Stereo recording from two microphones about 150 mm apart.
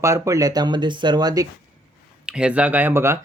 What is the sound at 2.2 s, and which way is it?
Speech, 5° right (ahead or behind).